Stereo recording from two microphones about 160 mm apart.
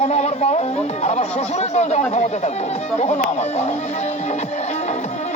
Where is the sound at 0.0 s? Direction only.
40° left (ahead or behind).